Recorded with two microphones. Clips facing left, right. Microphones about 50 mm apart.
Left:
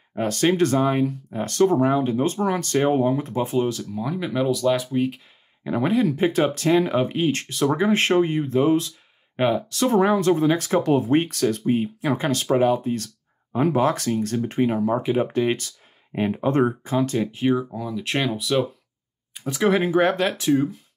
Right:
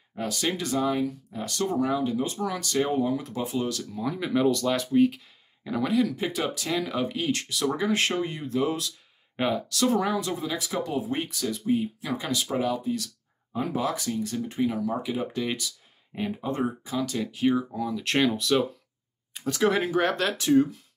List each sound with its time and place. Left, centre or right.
0.1 s speech: left
3.9 s speech: centre
5.1 s speech: left
12.5 s speech: left
16.8 s speech: left
17.6 s speech: centre
17.8 s speech: centre